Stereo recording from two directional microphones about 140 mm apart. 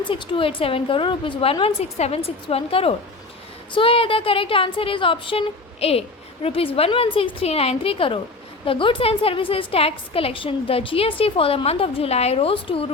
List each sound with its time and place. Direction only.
0.0 s a woman's voice: 35° left (ahead or behind)